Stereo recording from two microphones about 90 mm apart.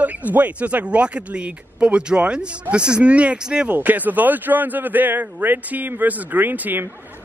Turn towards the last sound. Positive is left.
turn(degrees=-20)  # may be behind; listen again after turning